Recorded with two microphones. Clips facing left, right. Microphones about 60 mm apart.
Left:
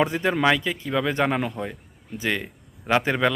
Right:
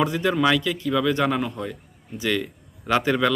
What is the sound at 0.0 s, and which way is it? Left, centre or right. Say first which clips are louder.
Speech: even; left.